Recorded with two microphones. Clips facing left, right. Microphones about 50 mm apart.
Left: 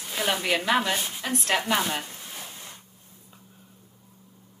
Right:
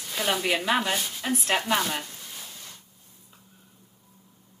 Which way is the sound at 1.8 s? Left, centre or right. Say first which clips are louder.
Left 1 dB; centre.